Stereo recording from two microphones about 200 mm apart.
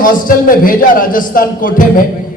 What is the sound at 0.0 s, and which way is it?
A man's voice, 45° left (ahead or behind).